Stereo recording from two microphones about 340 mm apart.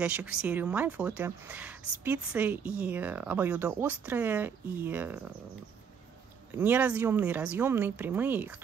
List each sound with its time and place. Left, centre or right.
0.0 s speech: centre
6.5 s speech: centre